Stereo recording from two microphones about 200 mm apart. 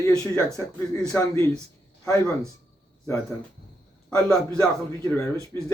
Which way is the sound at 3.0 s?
15° left (ahead or behind).